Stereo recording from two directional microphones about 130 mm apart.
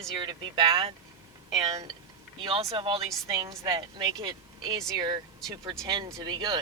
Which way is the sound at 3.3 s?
35° right (ahead or behind).